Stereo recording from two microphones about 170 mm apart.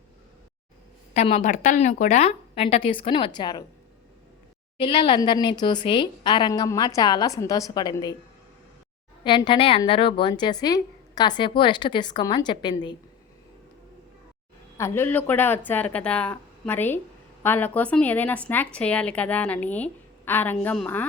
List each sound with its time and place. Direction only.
1.1 s a woman's voice: 40° left (ahead or behind); by 3.6 s 25° left (ahead or behind)
4.8 s a woman's voice: 30° left (ahead or behind)
9.2 s a woman's voice: 30° left (ahead or behind)
14.8 s a woman's voice: 15° left (ahead or behind)